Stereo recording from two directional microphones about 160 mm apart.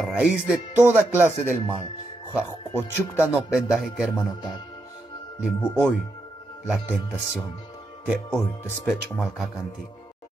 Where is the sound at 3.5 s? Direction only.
Centre (ahead or behind).